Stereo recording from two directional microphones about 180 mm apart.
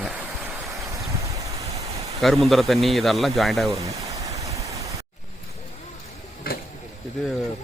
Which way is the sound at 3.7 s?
15° right (ahead or behind).